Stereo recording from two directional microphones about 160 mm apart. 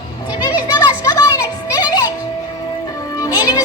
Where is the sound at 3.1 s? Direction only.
20° left (ahead or behind).